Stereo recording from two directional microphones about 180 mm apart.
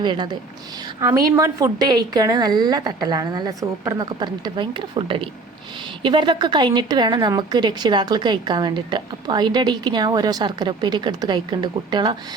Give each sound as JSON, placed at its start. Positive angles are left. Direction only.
{"t": 0.0, "sound": "a woman's voice", "side_deg": -25}